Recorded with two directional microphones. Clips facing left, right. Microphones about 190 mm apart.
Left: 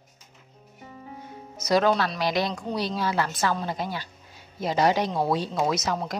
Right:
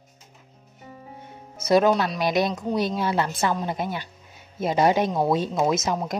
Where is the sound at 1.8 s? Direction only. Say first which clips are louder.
Right 2 dB; 15° right (ahead or behind).